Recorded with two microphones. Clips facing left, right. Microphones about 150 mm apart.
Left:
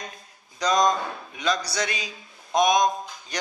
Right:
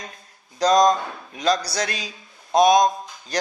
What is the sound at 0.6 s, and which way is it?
A man's voice, 35° right (ahead or behind).